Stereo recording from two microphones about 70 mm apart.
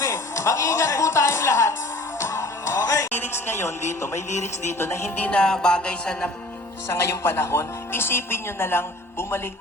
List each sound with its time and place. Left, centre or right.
0.0 s speech: left
2.2 s music: left
3.1 s a woman's voice: left
5.2 s music: centre
7.1 s a woman's voice: left